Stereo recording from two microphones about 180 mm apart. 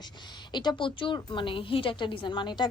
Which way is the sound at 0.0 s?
25° left (ahead or behind).